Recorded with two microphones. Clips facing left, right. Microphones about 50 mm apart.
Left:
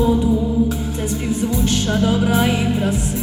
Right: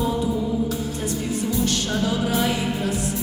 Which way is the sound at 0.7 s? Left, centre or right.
Left.